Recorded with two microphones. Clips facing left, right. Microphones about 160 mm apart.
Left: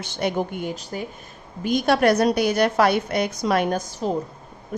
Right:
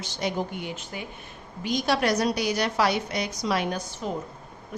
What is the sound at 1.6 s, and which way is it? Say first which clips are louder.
A woman's voice: left 6 dB; 55° left (ahead or behind).